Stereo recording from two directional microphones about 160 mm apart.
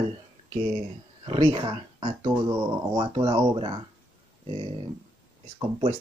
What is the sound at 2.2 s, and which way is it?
Speech, 20° right (ahead or behind).